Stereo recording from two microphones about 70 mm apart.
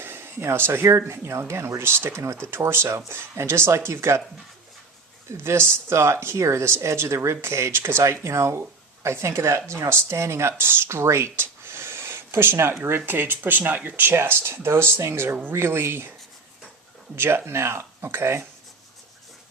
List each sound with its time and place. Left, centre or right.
0.0 s speech: right
5.3 s speech: right
17.2 s speech: right